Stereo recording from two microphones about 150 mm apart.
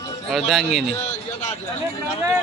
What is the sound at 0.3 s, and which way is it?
Speech, centre (ahead or behind).